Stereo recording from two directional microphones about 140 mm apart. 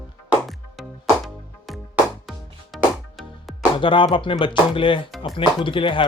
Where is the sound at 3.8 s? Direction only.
35° left (ahead or behind).